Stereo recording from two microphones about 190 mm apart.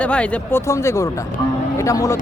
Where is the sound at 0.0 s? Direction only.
5° left (ahead or behind).